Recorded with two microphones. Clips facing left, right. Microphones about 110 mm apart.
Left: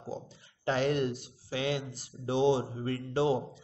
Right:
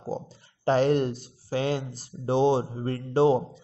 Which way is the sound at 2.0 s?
35° right (ahead or behind).